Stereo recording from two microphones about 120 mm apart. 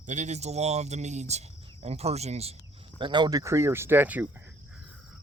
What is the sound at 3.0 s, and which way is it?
Speech, 40° right (ahead or behind).